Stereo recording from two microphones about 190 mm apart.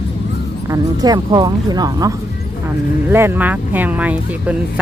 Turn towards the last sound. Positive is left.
turn(degrees=-10)  # may be behind; listen again after turning